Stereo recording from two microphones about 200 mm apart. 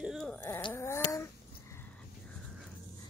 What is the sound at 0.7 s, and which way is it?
Dog, 15° left (ahead or behind).